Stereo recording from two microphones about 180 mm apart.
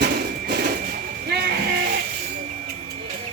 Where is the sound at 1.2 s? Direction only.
60° right (ahead or behind).